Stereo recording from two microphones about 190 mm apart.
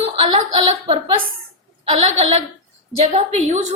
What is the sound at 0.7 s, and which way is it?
A woman's voice, 30° right (ahead or behind).